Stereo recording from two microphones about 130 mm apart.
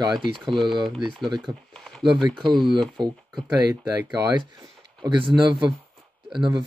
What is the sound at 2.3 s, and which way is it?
Speech, 40° right (ahead or behind).